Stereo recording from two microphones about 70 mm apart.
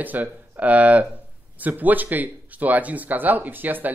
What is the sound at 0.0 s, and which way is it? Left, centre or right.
Speech, right.